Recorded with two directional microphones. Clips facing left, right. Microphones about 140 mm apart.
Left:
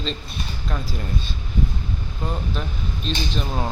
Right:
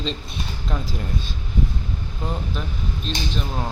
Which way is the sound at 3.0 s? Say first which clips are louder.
Left 2 dB; centre (ahead or behind).